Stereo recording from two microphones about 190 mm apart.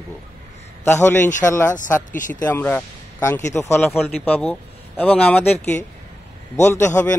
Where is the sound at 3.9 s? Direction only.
Centre (ahead or behind).